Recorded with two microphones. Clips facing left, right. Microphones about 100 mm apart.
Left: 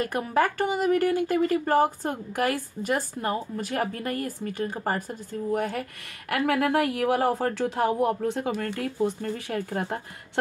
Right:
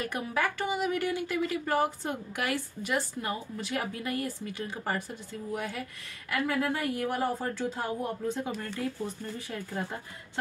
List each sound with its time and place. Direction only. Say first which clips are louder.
0.0 s speech: left 6 dB; 45° left (ahead or behind)
6.3 s speech: left 6 dB; 70° left (ahead or behind)